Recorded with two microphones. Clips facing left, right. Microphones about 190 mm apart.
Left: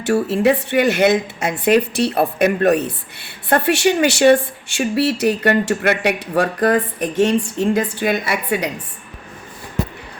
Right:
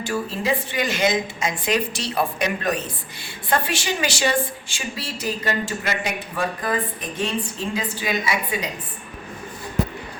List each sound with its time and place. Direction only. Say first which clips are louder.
0.0 s a woman's voice: left 10 dB; 70° left (ahead or behind)
7.7 s a woman's voice: left 8 dB; 50° left (ahead or behind); by 8.7 s 65° left (ahead or behind)